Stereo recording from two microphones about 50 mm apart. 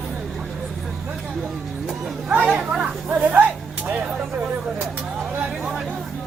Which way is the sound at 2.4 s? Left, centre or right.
Centre.